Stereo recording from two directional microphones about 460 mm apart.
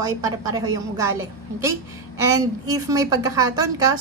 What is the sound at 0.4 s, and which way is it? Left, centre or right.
Speech, centre.